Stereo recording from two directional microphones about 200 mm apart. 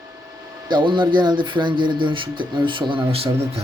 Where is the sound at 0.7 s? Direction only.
25° right (ahead or behind).